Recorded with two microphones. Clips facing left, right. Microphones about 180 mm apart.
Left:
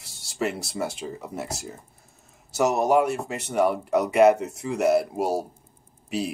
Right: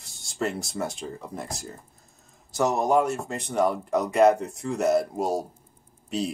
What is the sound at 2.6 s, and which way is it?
Speech, 10° left (ahead or behind).